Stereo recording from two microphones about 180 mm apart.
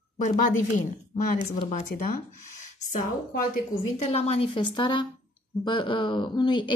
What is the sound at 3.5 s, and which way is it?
A woman's voice, 40° left (ahead or behind).